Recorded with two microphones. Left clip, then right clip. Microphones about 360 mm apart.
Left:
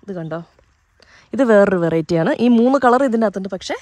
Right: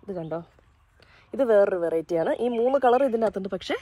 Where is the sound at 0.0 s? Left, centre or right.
Left.